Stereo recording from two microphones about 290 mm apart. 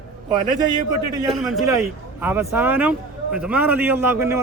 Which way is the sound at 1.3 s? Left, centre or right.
Centre.